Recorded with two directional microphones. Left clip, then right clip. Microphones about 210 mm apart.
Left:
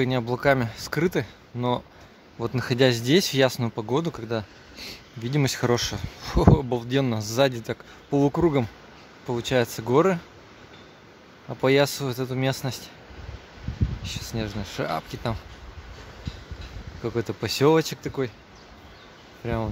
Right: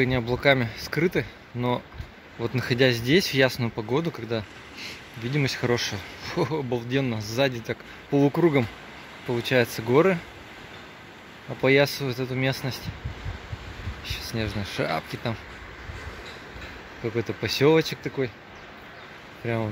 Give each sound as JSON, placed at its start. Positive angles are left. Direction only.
{"t": 0.0, "sound": "speech", "side_deg": 15}
{"t": 11.6, "sound": "speech", "side_deg": 20}
{"t": 14.0, "sound": "speech", "side_deg": 15}
{"t": 17.0, "sound": "speech", "side_deg": 20}
{"t": 19.4, "sound": "speech", "side_deg": 15}